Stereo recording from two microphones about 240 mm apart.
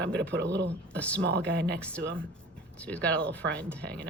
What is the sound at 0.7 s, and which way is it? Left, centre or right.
Speech, centre.